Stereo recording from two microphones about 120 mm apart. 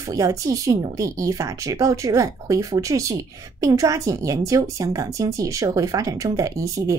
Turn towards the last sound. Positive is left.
turn(degrees=-25)  # may be behind; listen again after turning